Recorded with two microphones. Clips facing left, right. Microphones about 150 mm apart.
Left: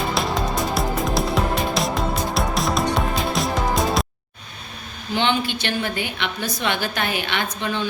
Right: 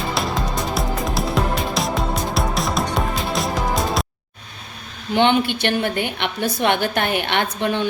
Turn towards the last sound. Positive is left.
turn(degrees=-60)  # may be behind; listen again after turning